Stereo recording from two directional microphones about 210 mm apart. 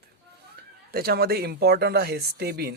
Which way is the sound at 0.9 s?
45° right (ahead or behind).